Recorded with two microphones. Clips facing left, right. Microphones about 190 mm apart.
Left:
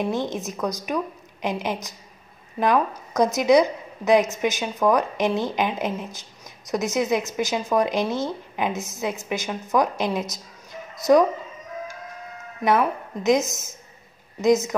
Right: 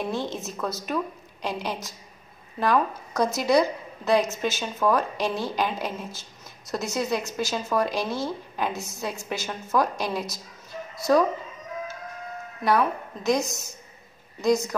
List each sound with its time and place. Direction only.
0.0 s a woman's voice: 20° left (ahead or behind)
3.2 s a woman's voice: 20° left (ahead or behind)
12.6 s a woman's voice: 20° left (ahead or behind)